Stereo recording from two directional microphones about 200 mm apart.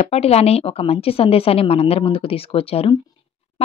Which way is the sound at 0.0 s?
30° left (ahead or behind).